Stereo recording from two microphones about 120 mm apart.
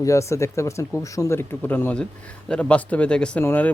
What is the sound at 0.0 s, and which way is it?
A man's voice, 25° left (ahead or behind).